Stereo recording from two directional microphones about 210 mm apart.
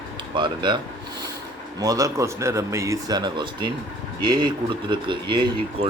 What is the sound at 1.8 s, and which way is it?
Speech, 15° right (ahead or behind).